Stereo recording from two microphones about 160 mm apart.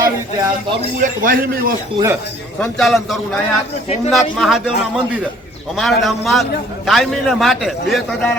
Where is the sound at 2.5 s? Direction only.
5° left (ahead or behind).